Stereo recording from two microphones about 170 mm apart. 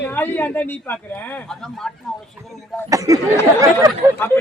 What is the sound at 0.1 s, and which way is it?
Speech, 10° left (ahead or behind).